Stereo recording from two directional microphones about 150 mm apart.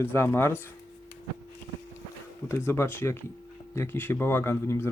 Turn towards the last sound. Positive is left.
turn(degrees=15)  # may be behind; listen again after turning